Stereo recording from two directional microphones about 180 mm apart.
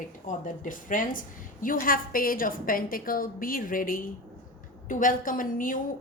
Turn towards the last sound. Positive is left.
turn(degrees=50)  # may be behind; listen again after turning